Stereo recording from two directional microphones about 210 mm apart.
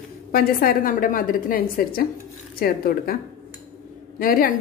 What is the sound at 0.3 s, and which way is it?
A woman's voice, 45° left (ahead or behind).